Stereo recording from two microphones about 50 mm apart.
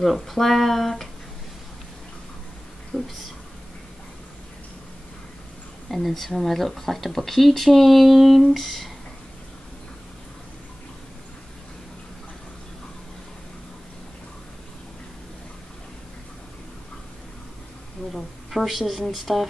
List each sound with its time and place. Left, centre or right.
0.0 s speech: centre
2.9 s a sound: centre
5.9 s speech: centre
18.1 s speech: centre